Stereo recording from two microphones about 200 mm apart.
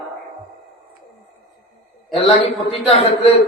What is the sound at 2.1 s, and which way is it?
Speech, 25° left (ahead or behind).